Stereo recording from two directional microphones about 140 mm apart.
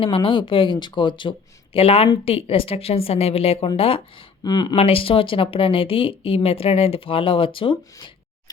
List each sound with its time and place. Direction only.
0.0 s a woman's voice: 40° left (ahead or behind)
4.7 s a woman's voice: 45° left (ahead or behind)